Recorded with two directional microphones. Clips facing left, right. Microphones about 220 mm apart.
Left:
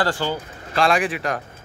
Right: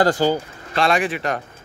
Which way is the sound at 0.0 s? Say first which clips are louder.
Right 6 dB; 40° right (ahead or behind).